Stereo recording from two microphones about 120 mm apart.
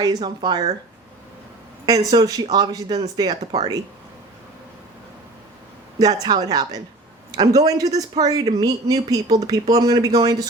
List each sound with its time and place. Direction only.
0.0 s speech: 35° right (ahead or behind)
1.9 s speech: 30° right (ahead or behind)
3.4 s speech: 65° right (ahead or behind)
6.1 s a man's voice: 35° right (ahead or behind)